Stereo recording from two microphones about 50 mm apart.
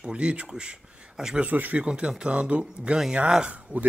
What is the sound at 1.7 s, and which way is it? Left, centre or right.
Speech, centre.